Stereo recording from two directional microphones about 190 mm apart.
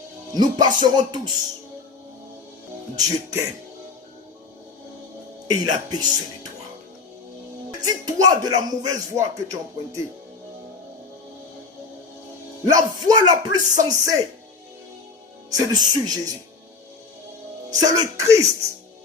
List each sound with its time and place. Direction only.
0.3 s speech: 20° right (ahead or behind)
2.9 s speech: 15° right (ahead or behind)
5.5 s speech: 20° right (ahead or behind)
7.8 s speech: 20° right (ahead or behind)
12.6 s speech: 20° right (ahead or behind)
15.4 s speech: 20° right (ahead or behind)
17.7 s speech: 20° right (ahead or behind)